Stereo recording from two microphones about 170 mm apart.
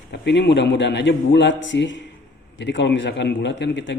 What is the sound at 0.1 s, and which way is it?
A man's voice, 90° left.